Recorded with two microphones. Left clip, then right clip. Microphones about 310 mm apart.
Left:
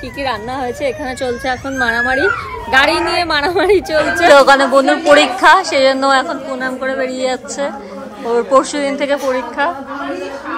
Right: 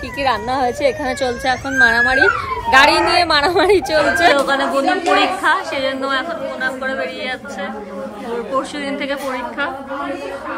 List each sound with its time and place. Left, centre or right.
0.2 s speech: centre
4.3 s a woman's voice: centre